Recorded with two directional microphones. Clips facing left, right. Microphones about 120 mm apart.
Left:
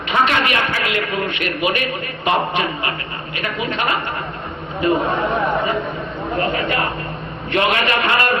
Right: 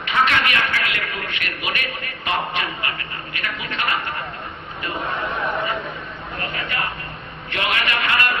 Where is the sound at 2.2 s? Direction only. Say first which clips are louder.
Left 6 dB; 25° left (ahead or behind).